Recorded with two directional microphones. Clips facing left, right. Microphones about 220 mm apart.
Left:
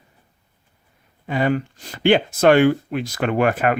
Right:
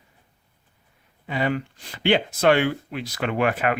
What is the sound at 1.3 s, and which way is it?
Speech, 45° left (ahead or behind).